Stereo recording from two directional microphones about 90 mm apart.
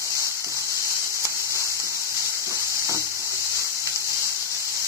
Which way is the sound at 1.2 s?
30° right (ahead or behind).